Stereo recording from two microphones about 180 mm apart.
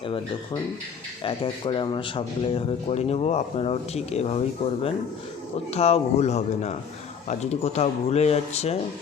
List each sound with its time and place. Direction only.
0.0 s speech: 30° left (ahead or behind)